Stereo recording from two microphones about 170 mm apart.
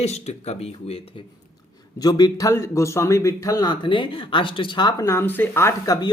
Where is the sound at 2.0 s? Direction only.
20° left (ahead or behind).